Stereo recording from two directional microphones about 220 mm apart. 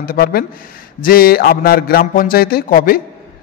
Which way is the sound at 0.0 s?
40° left (ahead or behind).